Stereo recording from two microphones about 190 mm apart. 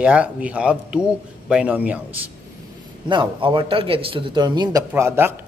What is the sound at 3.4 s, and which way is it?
A man's voice, 25° right (ahead or behind).